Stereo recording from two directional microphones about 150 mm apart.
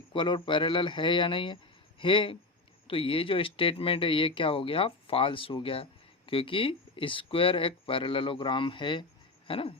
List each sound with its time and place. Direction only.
0.1 s speech: 35° left (ahead or behind)